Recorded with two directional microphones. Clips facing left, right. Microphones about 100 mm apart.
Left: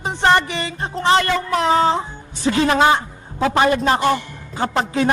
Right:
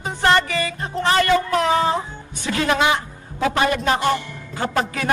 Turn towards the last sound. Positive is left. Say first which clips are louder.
# left 4 dB
turn(degrees=25)  # may be behind; listen again after turning